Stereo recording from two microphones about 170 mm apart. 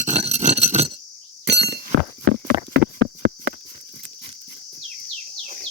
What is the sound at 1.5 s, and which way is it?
Chink, 85° right.